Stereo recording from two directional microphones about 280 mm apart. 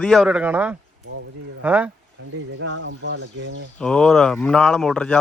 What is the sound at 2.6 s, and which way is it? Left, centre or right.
Speech, right.